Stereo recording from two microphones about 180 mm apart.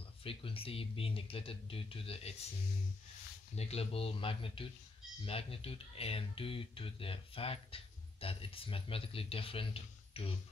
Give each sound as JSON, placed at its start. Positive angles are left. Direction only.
{"t": 0.2, "sound": "speech", "side_deg": 30}
{"t": 3.5, "sound": "speech", "side_deg": 35}